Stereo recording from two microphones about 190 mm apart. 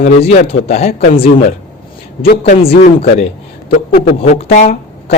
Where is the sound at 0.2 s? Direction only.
35° left (ahead or behind).